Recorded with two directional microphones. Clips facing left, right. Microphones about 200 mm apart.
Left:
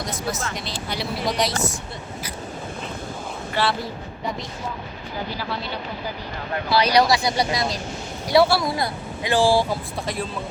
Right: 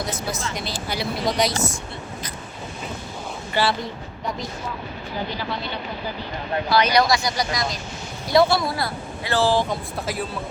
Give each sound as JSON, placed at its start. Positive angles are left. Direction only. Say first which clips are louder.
{"t": 0.5, "sound": "speech", "louder": "right 1 dB", "side_deg": 0}
{"t": 3.5, "sound": "speech", "louder": "right 1 dB", "side_deg": 0}
{"t": 6.7, "sound": "speech", "louder": "left 1 dB", "side_deg": 30}
{"t": 8.3, "sound": "a woman's voice", "louder": "even", "side_deg": 10}